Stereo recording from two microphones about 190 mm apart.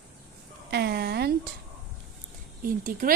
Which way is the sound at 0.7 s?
60° right (ahead or behind).